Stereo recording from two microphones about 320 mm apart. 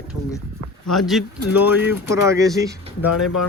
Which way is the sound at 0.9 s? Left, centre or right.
Centre.